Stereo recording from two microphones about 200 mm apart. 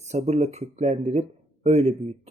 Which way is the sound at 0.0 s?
35° right (ahead or behind).